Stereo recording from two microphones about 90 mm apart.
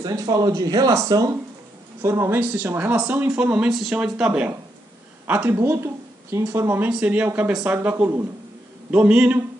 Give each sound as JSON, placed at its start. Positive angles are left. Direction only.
{"t": 0.0, "sound": "speech", "side_deg": -45}
{"t": 2.0, "sound": "a woman's voice", "side_deg": -30}
{"t": 6.9, "sound": "a woman's voice", "side_deg": -15}